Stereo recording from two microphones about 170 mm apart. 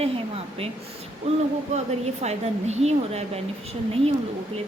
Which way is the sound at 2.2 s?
40° right (ahead or behind).